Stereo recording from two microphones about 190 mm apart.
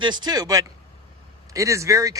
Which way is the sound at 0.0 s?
20° right (ahead or behind).